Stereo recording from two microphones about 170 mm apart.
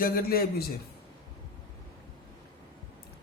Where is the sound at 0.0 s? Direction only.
60° left (ahead or behind).